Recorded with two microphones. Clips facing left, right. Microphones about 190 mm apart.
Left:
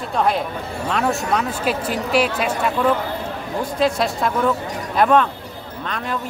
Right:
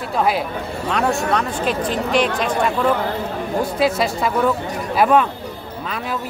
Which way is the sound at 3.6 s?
5° right (ahead or behind).